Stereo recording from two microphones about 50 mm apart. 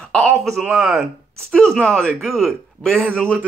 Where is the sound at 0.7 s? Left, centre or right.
Centre.